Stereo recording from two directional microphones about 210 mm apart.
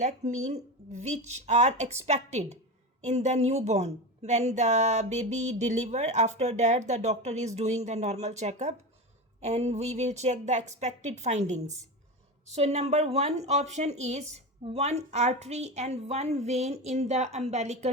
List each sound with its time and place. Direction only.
0.4 s a woman's voice: 35° right (ahead or behind)